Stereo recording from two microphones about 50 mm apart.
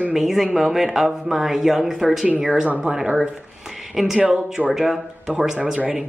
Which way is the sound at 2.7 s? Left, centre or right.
Centre.